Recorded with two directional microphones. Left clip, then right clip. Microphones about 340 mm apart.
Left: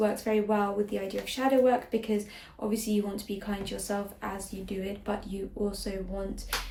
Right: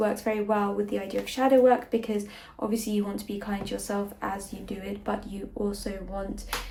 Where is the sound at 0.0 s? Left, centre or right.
Centre.